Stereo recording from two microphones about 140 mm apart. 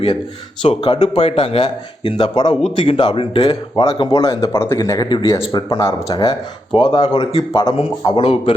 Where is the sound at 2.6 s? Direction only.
45° left (ahead or behind).